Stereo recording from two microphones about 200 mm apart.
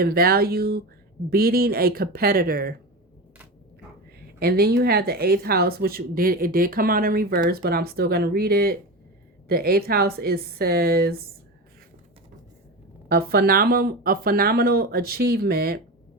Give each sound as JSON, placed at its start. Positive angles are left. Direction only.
{"t": 0.0, "sound": "speech", "side_deg": -50}
{"t": 4.4, "sound": "speech", "side_deg": -50}
{"t": 13.1, "sound": "speech", "side_deg": -50}